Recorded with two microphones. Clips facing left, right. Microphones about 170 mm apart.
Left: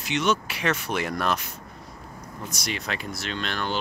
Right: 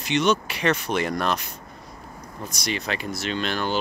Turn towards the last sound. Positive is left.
turn(degrees=-5)  # may be behind; listen again after turning